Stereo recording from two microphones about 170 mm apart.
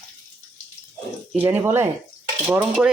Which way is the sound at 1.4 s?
10° right (ahead or behind).